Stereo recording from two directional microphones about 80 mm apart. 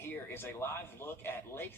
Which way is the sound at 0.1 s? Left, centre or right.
Left.